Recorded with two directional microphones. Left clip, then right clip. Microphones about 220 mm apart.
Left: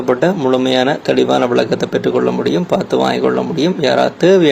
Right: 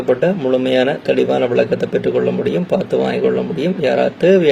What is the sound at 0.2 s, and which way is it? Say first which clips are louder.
A man's voice: left 2 dB; 20° left (ahead or behind).